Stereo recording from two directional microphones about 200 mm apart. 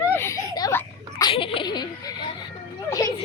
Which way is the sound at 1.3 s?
25° left (ahead or behind).